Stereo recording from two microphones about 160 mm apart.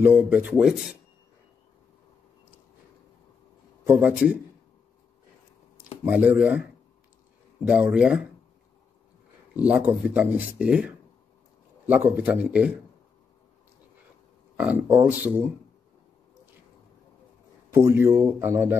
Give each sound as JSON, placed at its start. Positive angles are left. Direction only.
{"t": 0.0, "sound": "speech", "side_deg": -10}
{"t": 3.8, "sound": "speech", "side_deg": -10}
{"t": 6.0, "sound": "speech", "side_deg": -10}
{"t": 7.6, "sound": "speech", "side_deg": -10}
{"t": 9.6, "sound": "speech", "side_deg": -10}
{"t": 14.6, "sound": "speech", "side_deg": -10}
{"t": 17.7, "sound": "speech", "side_deg": -20}